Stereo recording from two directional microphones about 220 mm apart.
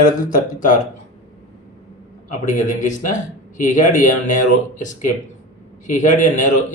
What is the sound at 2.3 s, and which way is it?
Speech, 35° left (ahead or behind).